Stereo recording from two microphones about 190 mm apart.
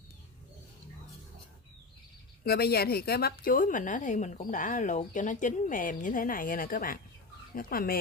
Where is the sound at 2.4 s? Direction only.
55° left (ahead or behind).